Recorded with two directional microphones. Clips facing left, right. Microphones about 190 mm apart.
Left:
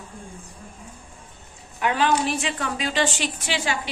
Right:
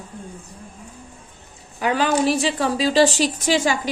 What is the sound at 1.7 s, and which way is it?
A woman's voice, 35° right (ahead or behind).